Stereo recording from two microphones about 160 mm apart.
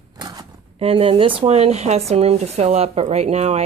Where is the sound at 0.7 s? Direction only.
35° right (ahead or behind).